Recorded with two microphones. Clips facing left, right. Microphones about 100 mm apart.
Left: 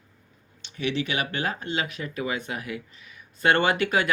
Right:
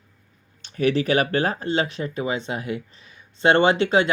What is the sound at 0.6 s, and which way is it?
Speech, 45° right (ahead or behind).